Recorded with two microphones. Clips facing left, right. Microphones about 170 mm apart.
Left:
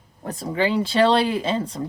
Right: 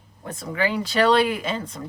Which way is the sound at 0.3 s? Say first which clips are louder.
Left 3 dB; 35° left (ahead or behind).